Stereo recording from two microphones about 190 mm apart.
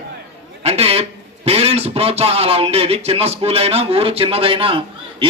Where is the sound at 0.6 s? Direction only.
30° right (ahead or behind).